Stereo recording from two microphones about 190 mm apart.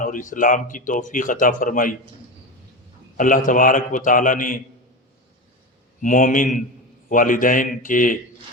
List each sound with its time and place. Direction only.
0.0 s speech: 45° left (ahead or behind)
3.2 s speech: 45° left (ahead or behind)
6.0 s speech: 45° left (ahead or behind)